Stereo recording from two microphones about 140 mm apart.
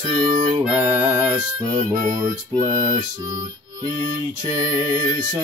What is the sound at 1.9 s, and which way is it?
Music, 75° right (ahead or behind).